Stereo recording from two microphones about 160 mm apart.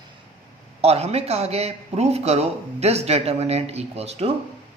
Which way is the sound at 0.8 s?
40° right (ahead or behind).